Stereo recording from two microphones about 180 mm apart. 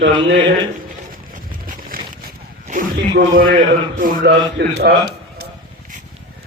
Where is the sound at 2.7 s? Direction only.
50° right (ahead or behind).